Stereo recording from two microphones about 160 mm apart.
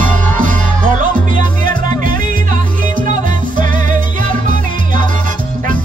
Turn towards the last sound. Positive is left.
turn(degrees=-55)  # may be behind; listen again after turning